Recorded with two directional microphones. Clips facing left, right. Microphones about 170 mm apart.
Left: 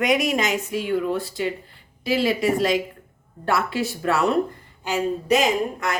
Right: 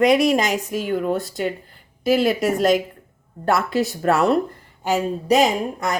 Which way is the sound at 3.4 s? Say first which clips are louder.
Right 3 dB; 40° right (ahead or behind).